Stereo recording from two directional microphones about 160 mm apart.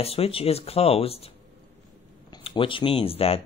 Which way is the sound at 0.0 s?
40° left (ahead or behind).